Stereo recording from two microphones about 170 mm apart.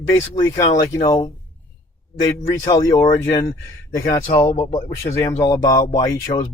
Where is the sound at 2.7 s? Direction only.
25° left (ahead or behind).